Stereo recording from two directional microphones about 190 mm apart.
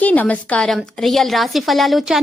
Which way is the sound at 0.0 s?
10° left (ahead or behind).